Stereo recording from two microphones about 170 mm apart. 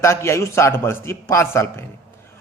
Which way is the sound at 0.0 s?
15° left (ahead or behind).